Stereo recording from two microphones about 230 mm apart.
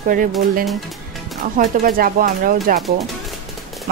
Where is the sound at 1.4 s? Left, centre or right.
Right.